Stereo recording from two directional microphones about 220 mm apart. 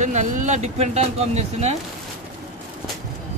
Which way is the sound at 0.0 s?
35° right (ahead or behind).